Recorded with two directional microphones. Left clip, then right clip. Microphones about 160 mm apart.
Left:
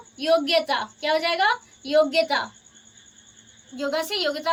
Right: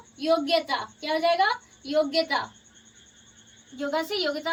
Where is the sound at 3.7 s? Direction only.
20° left (ahead or behind).